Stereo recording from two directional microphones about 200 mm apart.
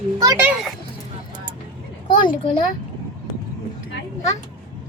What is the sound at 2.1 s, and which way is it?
Speech, 25° left (ahead or behind).